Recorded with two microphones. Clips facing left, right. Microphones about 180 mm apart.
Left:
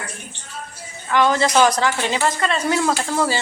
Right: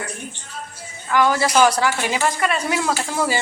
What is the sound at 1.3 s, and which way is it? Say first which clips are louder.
Speech: even; 5° right (ahead or behind).